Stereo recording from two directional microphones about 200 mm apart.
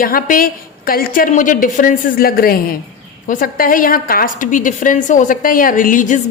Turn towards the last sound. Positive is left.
turn(degrees=40)  # may be behind; listen again after turning